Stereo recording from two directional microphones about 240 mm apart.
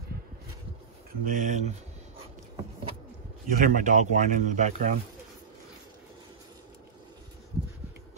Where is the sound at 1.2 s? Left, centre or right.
Right.